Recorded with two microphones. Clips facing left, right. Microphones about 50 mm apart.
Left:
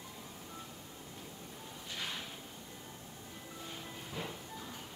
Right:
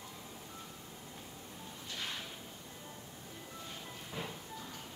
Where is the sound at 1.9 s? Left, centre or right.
Centre.